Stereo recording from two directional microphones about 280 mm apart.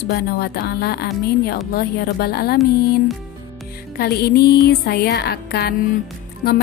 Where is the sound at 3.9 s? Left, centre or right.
Left.